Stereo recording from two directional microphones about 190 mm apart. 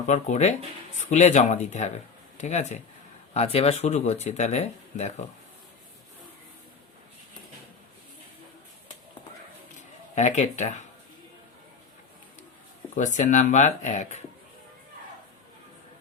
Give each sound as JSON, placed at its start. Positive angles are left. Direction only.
{"t": 0.1, "sound": "speech", "side_deg": 35}
{"t": 10.2, "sound": "speech", "side_deg": 35}
{"t": 12.9, "sound": "speech", "side_deg": 40}